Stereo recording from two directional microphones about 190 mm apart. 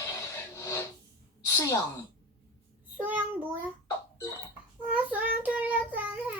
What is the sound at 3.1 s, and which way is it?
Child singing, 10° right (ahead or behind).